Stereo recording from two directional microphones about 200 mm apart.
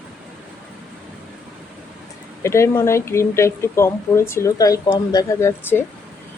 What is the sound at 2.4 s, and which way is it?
Speech, 15° left (ahead or behind).